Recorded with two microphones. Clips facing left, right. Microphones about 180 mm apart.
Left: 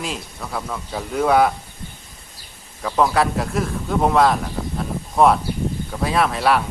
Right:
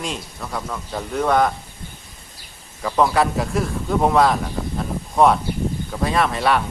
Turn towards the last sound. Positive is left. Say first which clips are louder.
# left 1 dB
turn(degrees=0)  # may be behind; listen again after turning